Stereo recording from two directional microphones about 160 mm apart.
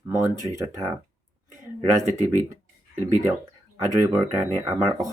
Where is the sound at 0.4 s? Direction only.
20° right (ahead or behind).